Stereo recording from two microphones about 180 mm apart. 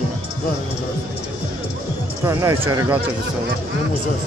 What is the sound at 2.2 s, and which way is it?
Speech, 15° right (ahead or behind).